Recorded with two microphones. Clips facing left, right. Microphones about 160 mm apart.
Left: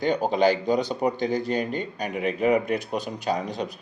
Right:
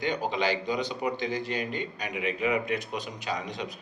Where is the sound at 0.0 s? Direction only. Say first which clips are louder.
Left 7 dB; 45° left (ahead or behind).